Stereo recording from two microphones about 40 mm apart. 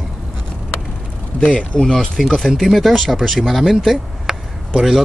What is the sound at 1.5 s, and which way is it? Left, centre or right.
Speech, left.